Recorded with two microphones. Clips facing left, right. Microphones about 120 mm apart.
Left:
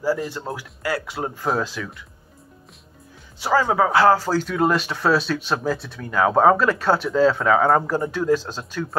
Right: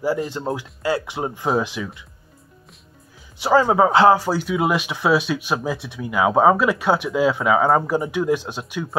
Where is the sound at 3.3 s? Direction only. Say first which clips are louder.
Right 3 dB; 20° right (ahead or behind).